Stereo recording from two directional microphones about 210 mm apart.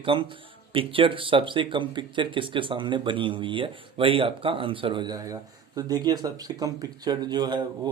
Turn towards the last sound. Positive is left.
turn(degrees=-20)  # may be behind; listen again after turning